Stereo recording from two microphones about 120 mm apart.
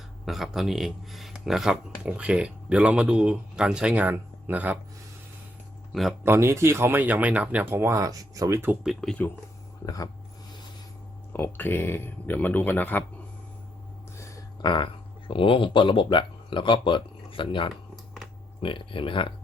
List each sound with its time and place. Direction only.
0.3 s speech: centre (ahead or behind)
5.9 s speech: centre (ahead or behind)
6.2 s speech: 20° right (ahead or behind)
8.8 s speech: centre (ahead or behind)
11.3 s speech: 15° left (ahead or behind)
14.2 s a sound: 25° left (ahead or behind)
14.6 s speech: 40° left (ahead or behind)